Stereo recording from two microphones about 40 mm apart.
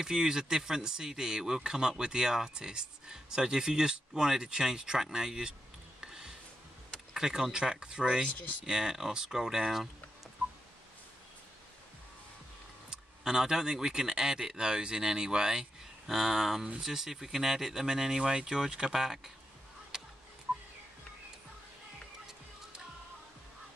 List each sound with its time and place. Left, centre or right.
0.0 s speech: centre
5.9 s a sound: centre
7.2 s speech: centre
8.7 s speech: centre
12.9 s speech: centre
16.1 s speech: centre
19.9 s music: centre